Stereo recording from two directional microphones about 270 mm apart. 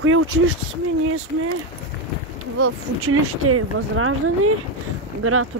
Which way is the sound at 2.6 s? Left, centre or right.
Right.